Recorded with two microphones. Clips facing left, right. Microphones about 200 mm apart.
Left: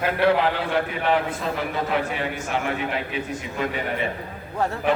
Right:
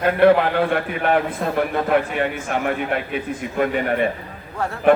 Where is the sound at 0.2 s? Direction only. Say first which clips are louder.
Right 6 dB; 55° right (ahead or behind).